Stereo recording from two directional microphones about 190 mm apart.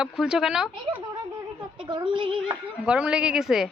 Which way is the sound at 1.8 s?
25° right (ahead or behind).